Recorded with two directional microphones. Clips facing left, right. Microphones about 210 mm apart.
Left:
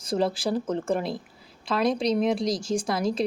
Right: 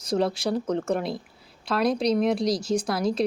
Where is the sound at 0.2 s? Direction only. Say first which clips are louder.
Left 1 dB; centre (ahead or behind).